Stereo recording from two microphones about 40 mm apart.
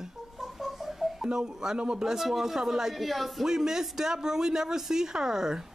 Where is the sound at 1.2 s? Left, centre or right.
Centre.